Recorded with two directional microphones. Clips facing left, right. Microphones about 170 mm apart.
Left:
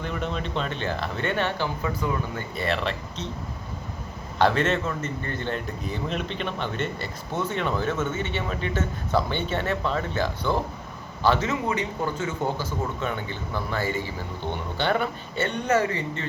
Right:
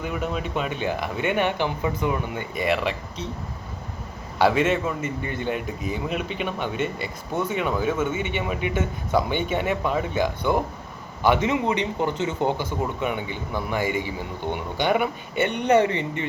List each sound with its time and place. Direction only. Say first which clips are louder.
0.0 s a man's voice: right 2 dB; 5° right (ahead or behind)
4.4 s a man's voice: right 2 dB; 10° right (ahead or behind)